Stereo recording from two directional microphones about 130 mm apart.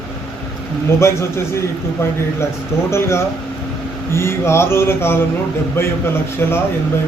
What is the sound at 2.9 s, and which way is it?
A man's voice, 20° left (ahead or behind).